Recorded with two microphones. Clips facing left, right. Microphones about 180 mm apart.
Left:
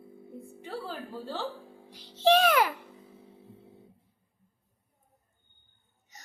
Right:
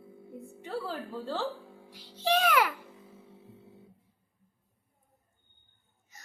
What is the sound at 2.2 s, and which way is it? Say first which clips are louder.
Speech: left 4 dB; 25° left (ahead or behind).